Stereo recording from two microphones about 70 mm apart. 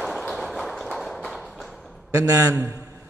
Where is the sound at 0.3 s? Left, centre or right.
Centre.